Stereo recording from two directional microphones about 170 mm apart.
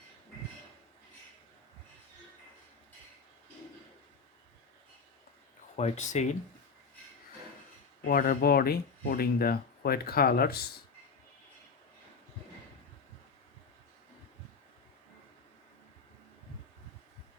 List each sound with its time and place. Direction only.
5.7 s speech: 40° left (ahead or behind)
8.0 s speech: 60° left (ahead or behind)